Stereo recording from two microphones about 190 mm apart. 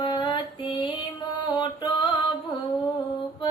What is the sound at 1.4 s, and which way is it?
Music, 25° left (ahead or behind).